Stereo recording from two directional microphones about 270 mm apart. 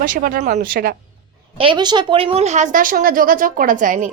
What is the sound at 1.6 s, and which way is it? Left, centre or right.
Speech, centre.